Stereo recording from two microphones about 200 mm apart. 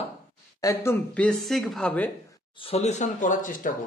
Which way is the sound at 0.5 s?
15° left (ahead or behind).